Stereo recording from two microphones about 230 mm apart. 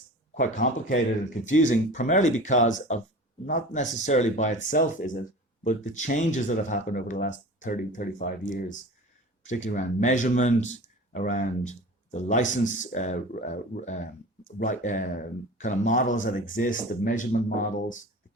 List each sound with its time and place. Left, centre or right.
0.3 s speech: left